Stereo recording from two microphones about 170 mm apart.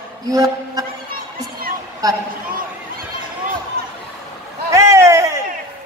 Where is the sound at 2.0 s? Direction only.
20° right (ahead or behind).